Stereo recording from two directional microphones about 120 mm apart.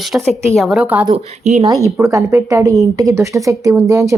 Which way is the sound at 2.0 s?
25° right (ahead or behind).